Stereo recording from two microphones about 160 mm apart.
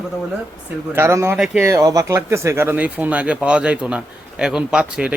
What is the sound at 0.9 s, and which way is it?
Speech, 15° right (ahead or behind).